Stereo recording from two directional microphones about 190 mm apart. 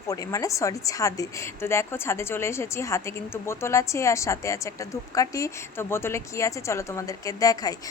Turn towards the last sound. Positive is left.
turn(degrees=20)  # may be behind; listen again after turning